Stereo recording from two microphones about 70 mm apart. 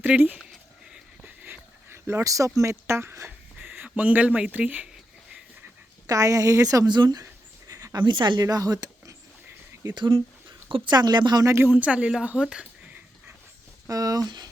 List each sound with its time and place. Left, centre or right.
0.1 s speech: centre
1.9 s a sound: right
2.2 s a man's voice: right
6.1 s a woman's voice: right
7.7 s a sound: right
7.9 s a woman's voice: right
9.9 s speech: right
11.4 s speech: right
11.7 s speech: centre
13.8 s a sound: right